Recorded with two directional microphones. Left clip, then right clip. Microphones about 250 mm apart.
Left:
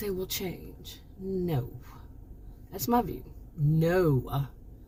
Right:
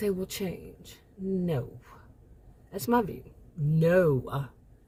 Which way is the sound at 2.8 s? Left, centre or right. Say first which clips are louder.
Right 1 dB; centre.